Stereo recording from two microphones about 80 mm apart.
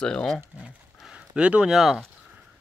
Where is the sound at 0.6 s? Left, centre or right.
Centre.